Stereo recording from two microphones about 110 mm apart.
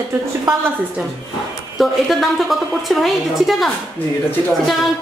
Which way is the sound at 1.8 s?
Centre (ahead or behind).